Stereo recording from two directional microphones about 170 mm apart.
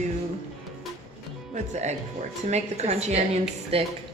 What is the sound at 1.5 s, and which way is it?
A woman's voice, 45° right (ahead or behind).